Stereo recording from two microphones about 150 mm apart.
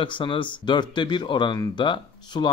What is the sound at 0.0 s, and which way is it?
Speech, 35° left (ahead or behind).